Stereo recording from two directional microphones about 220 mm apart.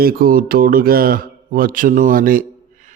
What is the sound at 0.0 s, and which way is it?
Mantra, 40° right (ahead or behind).